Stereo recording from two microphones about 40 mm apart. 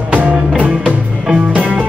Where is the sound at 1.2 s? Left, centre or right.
Right.